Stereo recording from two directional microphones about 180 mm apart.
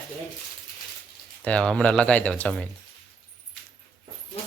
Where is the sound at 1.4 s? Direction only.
5° left (ahead or behind).